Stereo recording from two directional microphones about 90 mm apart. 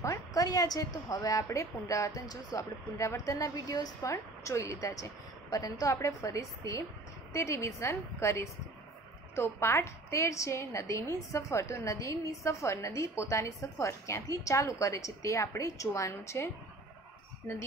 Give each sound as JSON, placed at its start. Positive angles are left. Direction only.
{"t": 0.0, "sound": "a woman's voice", "side_deg": 40}